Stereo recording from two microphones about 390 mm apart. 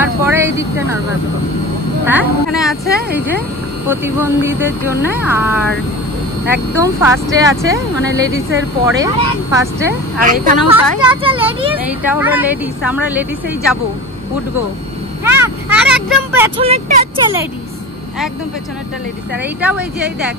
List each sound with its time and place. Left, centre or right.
0.0 s speech: centre
2.0 s speech: centre
3.9 s speech: centre
6.8 s speech: centre
8.8 s speech: centre
9.8 s speech: right; by 12.4 s centre
15.2 s speech: centre
19.6 s speech: centre